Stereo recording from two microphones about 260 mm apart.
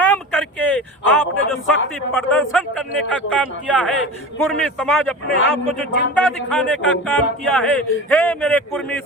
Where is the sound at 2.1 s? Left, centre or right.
Centre.